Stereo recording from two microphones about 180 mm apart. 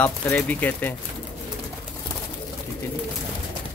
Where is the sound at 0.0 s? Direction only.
10° left (ahead or behind).